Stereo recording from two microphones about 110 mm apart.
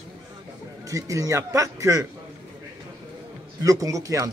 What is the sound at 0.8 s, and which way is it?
Speech, 30° right (ahead or behind).